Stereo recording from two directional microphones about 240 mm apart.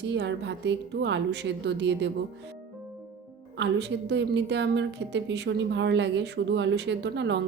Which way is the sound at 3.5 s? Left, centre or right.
Right.